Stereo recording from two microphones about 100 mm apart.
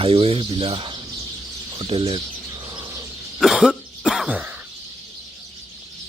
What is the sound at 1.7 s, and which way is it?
Speech, 70° right (ahead or behind).